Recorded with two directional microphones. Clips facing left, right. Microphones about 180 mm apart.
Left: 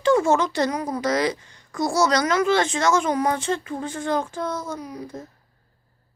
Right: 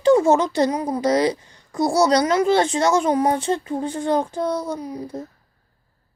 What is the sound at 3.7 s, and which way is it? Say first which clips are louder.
Speech: right 4 dB; 15° right (ahead or behind).